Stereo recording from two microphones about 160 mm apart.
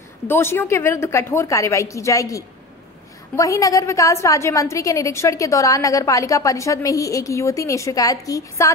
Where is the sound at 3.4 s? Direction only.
20° left (ahead or behind).